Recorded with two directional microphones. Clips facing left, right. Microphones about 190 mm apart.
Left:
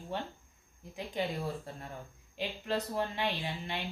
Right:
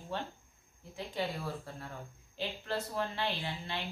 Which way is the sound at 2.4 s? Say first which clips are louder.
Left 2 dB; 15° left (ahead or behind).